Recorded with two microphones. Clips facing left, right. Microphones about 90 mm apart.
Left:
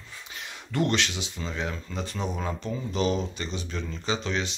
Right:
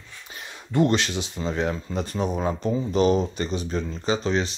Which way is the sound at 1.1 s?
45° right (ahead or behind).